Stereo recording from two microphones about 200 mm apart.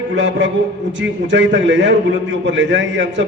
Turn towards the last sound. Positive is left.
turn(degrees=-65)  # may be behind; listen again after turning